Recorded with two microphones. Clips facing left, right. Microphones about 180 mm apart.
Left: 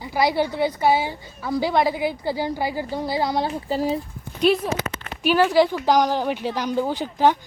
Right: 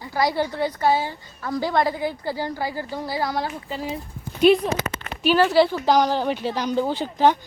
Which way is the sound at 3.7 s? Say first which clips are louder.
Left 7 dB; 40° left (ahead or behind).